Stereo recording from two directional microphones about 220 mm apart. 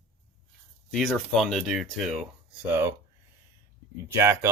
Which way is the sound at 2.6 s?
10° right (ahead or behind).